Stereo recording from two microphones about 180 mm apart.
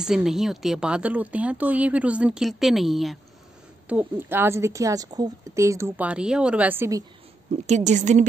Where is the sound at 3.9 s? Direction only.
10° right (ahead or behind).